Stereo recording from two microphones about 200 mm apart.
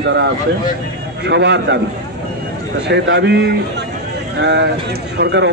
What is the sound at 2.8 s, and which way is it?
A man's voice, 60° right (ahead or behind).